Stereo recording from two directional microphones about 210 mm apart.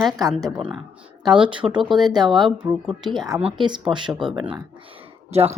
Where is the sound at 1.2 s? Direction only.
20° right (ahead or behind).